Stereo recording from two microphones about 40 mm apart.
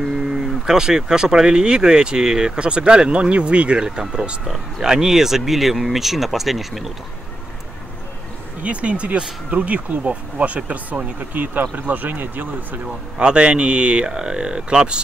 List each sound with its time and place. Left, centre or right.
0.0 s speech: centre
8.6 s speech: right
13.2 s speech: right